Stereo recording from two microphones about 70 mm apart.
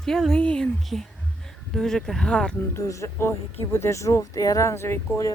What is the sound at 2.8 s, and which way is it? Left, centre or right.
Speech, left.